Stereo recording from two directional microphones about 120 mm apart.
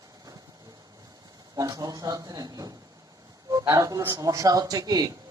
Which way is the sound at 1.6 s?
30° right (ahead or behind).